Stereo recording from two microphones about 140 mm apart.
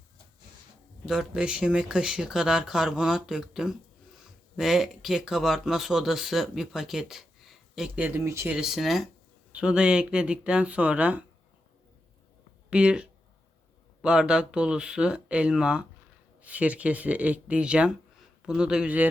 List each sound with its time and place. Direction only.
1.0 s speech: 5° right (ahead or behind); by 8.5 s 20° right (ahead or behind)
8.5 s speech: 5° right (ahead or behind)
12.7 s speech: 5° right (ahead or behind)